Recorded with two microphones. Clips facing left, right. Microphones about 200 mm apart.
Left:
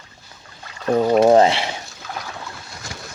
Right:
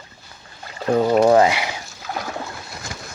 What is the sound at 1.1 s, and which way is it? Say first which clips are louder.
Speech: left 2 dB; 20° left (ahead or behind).